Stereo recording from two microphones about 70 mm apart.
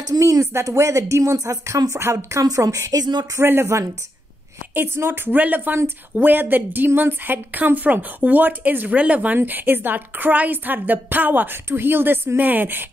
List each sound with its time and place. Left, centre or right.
0.2 s speech: right
3.3 s a woman's voice: right